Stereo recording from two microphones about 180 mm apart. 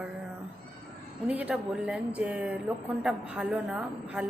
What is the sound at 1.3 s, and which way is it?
Speech, 10° right (ahead or behind).